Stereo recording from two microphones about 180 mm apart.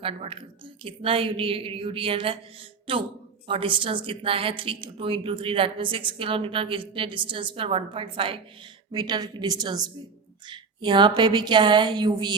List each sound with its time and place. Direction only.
0.0 s a woman's voice: 30° right (ahead or behind)
3.4 s a woman's voice: 30° right (ahead or behind)